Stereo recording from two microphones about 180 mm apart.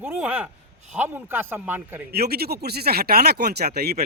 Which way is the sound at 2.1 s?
60° right (ahead or behind).